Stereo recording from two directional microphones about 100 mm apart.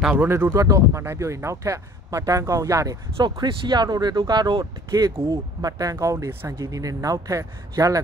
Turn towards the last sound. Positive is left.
turn(degrees=-35)  # may be behind; listen again after turning